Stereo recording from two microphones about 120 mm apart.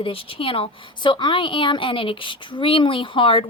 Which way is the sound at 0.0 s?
50° left (ahead or behind).